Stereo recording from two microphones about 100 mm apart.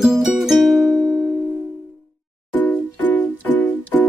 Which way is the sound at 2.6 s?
15° left (ahead or behind).